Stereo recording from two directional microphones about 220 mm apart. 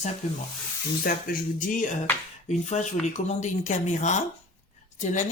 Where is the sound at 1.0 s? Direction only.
40° left (ahead or behind).